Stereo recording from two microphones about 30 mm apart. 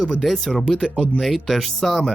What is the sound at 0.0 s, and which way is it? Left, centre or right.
Speech, left.